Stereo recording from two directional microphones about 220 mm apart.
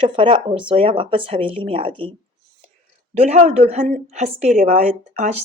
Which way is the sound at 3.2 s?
30° right (ahead or behind).